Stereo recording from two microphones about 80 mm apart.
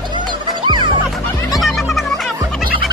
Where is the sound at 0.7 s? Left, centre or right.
Right.